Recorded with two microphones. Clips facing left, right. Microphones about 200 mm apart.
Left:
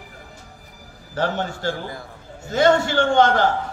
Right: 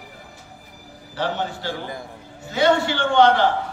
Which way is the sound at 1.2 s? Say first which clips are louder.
Left 2 dB; 45° left (ahead or behind).